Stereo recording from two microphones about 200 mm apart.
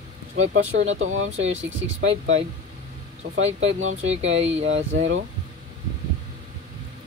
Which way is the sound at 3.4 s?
70° right (ahead or behind).